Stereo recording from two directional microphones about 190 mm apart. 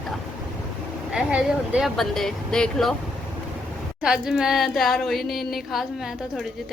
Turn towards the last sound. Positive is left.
turn(degrees=0)  # may be behind; listen again after turning